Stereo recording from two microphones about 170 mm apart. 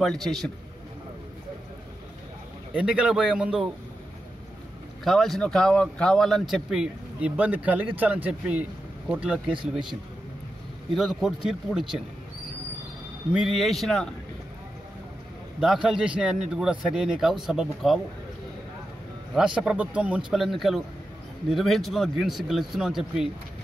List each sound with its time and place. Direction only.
0.0 s speech: centre (ahead or behind)
2.7 s speech: 5° right (ahead or behind)
5.0 s speech: centre (ahead or behind)
9.5 s speech: 30° right (ahead or behind)
11.0 s speech: centre (ahead or behind)
13.3 s speech: centre (ahead or behind)
15.6 s speech: 5° right (ahead or behind)
19.3 s speech: 5° right (ahead or behind)